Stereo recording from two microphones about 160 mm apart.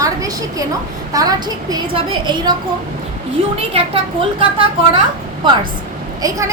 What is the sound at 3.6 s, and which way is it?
A woman's voice, 35° right (ahead or behind).